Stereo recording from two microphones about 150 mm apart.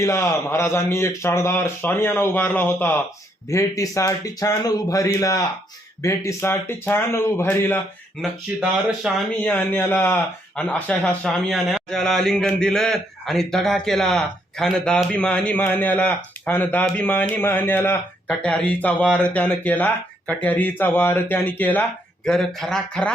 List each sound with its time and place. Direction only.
0.0 s speech: 20° left (ahead or behind)
8.2 s speech: 5° left (ahead or behind)
9.4 s speech: 10° left (ahead or behind)